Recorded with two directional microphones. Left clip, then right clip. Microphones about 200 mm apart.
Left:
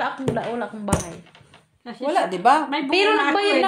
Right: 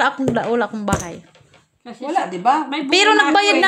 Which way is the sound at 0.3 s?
60° right (ahead or behind).